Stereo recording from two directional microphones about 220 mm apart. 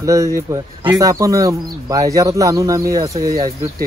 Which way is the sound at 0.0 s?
15° right (ahead or behind).